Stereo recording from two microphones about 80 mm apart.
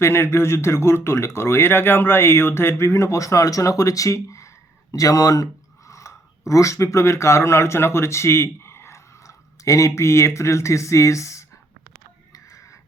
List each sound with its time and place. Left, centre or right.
0.0 s speech: left